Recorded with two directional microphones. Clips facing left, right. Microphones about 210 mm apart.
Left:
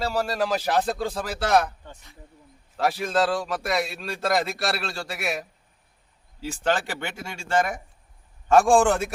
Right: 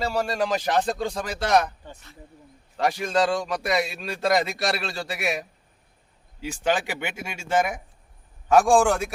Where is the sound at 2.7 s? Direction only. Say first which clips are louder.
Even; 5° left (ahead or behind); by 7.6 s 20° right (ahead or behind).